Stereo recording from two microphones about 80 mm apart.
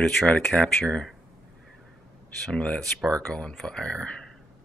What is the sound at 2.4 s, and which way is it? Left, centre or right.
Speech, centre.